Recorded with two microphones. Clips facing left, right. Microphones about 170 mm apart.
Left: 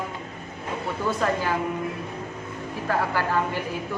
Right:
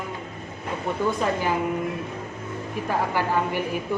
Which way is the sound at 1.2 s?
15° right (ahead or behind).